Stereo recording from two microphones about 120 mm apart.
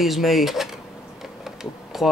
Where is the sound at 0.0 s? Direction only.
Centre (ahead or behind).